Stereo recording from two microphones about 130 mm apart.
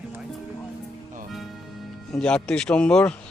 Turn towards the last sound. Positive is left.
turn(degrees=5)  # may be behind; listen again after turning